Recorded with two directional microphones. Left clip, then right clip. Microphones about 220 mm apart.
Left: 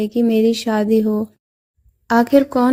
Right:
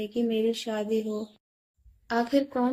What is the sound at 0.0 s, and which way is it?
Speech, 45° left (ahead or behind).